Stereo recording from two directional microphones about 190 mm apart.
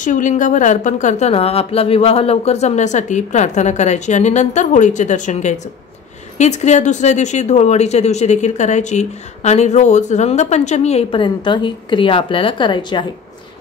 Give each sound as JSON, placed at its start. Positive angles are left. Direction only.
{"t": 0.0, "sound": "speech", "side_deg": 40}